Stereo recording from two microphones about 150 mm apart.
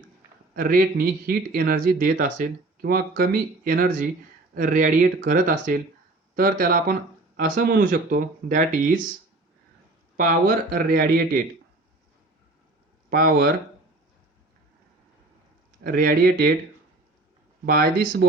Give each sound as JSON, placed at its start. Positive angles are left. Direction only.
{"t": 0.5, "sound": "speech", "side_deg": -75}
{"t": 10.2, "sound": "speech", "side_deg": -70}
{"t": 13.1, "sound": "speech", "side_deg": -80}
{"t": 15.8, "sound": "speech", "side_deg": -80}
{"t": 17.7, "sound": "speech", "side_deg": -90}